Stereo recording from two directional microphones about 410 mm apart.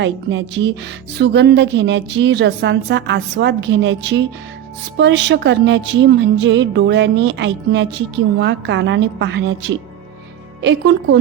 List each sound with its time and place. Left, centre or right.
0.0 s speech: right